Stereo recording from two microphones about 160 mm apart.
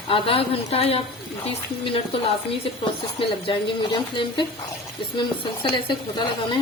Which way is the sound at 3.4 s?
30° left (ahead or behind).